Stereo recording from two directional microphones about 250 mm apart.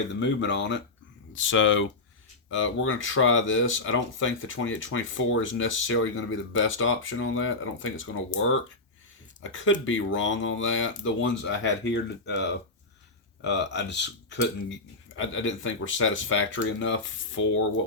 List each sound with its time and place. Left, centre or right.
0.1 s speech: left